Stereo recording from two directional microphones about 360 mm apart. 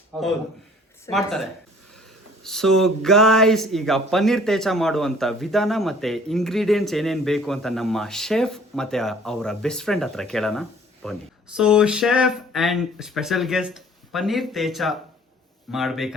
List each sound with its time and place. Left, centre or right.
0.1 s a man's voice: centre